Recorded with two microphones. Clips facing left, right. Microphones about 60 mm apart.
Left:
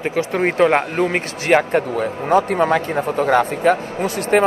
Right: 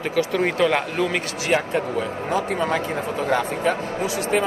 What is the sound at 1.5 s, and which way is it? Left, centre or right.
Speech, left.